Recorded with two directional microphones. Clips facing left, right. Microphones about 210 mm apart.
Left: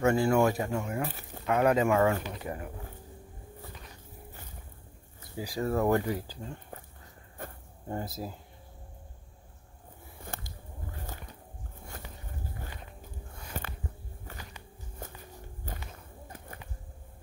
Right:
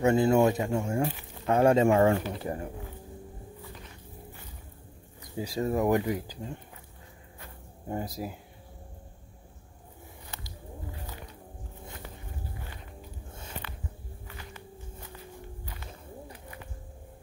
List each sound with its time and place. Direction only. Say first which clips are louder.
0.0 s speech: right 2 dB; 20° right (ahead or behind)
5.4 s speech: right 1 dB; 20° right (ahead or behind)
7.9 s speech: right 2 dB; 15° right (ahead or behind)
10.2 s a sound: left 4 dB; 50° left (ahead or behind)